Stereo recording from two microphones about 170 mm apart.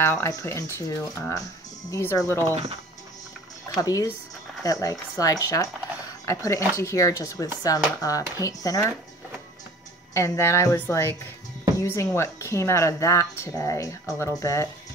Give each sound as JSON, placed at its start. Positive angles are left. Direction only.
{"t": 0.0, "sound": "speech", "side_deg": 15}
{"t": 2.5, "sound": "speech", "side_deg": -35}
{"t": 3.7, "sound": "speech", "side_deg": 20}
{"t": 10.1, "sound": "speech", "side_deg": 15}